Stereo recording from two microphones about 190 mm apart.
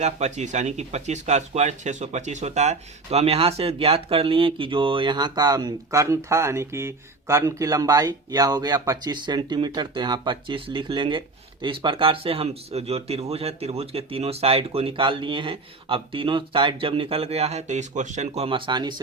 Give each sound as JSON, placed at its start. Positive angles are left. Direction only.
{"t": 0.0, "sound": "speech", "side_deg": -35}